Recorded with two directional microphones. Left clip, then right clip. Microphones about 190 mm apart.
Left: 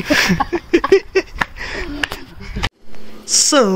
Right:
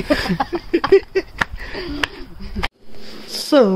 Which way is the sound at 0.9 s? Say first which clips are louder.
Right 2 dB; 25° left (ahead or behind).